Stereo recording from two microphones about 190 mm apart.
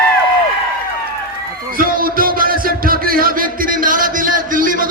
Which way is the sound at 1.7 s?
50° right (ahead or behind).